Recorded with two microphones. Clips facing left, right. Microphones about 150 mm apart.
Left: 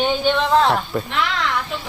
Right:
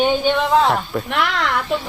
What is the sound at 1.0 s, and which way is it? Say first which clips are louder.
Speech: right 2 dB; 65° right (ahead or behind).